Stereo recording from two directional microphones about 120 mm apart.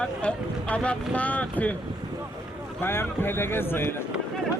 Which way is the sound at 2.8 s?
20° left (ahead or behind).